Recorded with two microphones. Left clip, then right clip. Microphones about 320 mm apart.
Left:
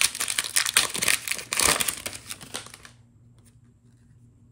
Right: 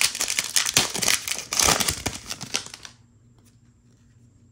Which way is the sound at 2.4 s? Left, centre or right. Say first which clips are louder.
Right 8 dB; right.